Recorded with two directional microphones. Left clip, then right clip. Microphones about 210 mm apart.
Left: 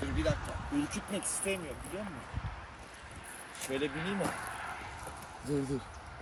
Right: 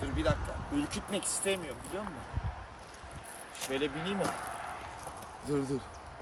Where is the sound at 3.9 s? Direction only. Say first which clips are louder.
Right 1 dB; 55° right (ahead or behind).